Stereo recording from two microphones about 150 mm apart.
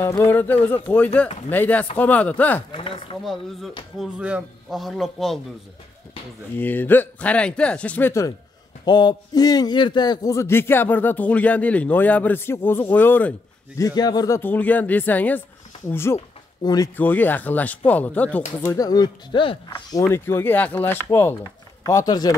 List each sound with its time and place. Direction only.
0.0 s a man's voice: 15° left (ahead or behind)
2.7 s speech: 35° left (ahead or behind)
4.0 s a man's voice: 10° right (ahead or behind)
6.6 s a man's voice: 15° left (ahead or behind)
8.8 s a man's voice: 30° left (ahead or behind); by 13.3 s 10° left (ahead or behind)
13.7 s a man's voice: 25° left (ahead or behind)
16.9 s a man's voice: 10° left (ahead or behind)
18.7 s speech: 25° left (ahead or behind)
19.9 s a man's voice: 20° left (ahead or behind)